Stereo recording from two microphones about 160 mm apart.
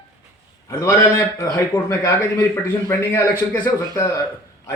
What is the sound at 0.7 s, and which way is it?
A man's voice, 15° left (ahead or behind).